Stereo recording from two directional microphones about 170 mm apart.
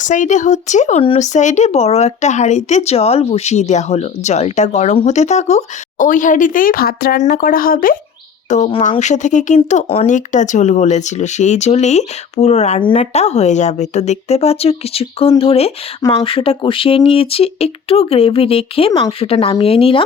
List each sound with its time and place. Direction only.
0.0 s speech: 45° left (ahead or behind)
8.4 s speech: 45° left (ahead or behind)
18.9 s speech: 20° left (ahead or behind)
19.2 s speech: 35° left (ahead or behind)